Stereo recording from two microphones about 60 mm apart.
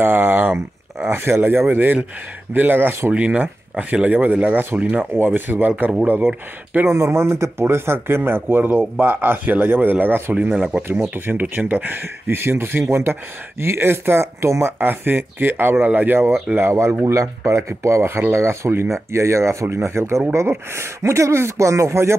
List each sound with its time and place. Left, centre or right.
0.0 s speech: right
5.1 s speech: right
6.9 s speech: right
14.9 s speech: right
17.0 s speech: right